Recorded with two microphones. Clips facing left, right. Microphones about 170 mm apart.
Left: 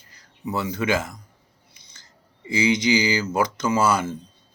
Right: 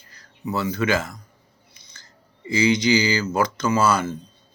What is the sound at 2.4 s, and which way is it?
Speech, 15° left (ahead or behind).